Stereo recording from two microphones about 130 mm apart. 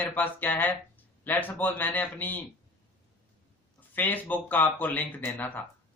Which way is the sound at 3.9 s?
15° left (ahead or behind).